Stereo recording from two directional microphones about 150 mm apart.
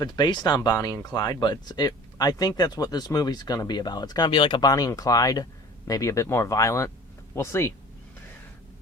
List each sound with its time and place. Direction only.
0.0 s speech: 30° left (ahead or behind)